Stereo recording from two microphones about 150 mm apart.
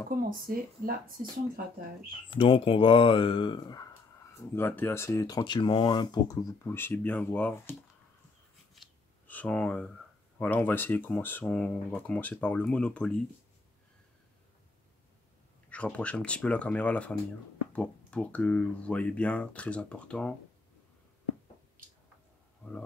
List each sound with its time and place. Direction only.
0.3 s speech: 75° right (ahead or behind)
2.0 s speech: 35° left (ahead or behind)
4.6 s speech: 15° left (ahead or behind)
8.8 s a sound: centre (ahead or behind)
9.3 s speech: 10° left (ahead or behind)
15.7 s speech: 10° left (ahead or behind)